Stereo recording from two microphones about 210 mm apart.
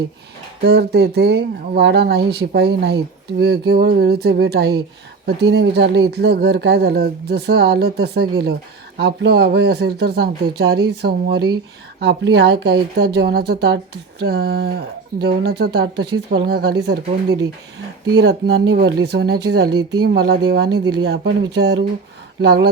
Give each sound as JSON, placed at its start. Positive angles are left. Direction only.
{"t": 0.6, "sound": "speech", "side_deg": -50}